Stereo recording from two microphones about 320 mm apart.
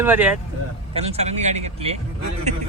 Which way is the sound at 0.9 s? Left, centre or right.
Centre.